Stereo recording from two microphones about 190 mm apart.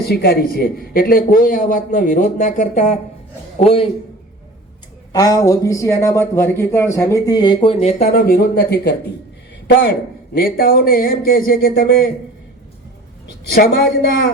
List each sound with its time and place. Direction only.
0.0 s a man's voice: 55° left (ahead or behind); by 3.8 s 30° left (ahead or behind)
5.1 s speech: 20° left (ahead or behind); by 9.0 s 60° left (ahead or behind)
10.3 s speech: 50° left (ahead or behind)
13.5 s a woman's voice: 65° left (ahead or behind)